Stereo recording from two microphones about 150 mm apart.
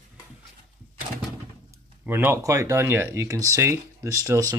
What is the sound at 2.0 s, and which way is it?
Speech, 15° right (ahead or behind).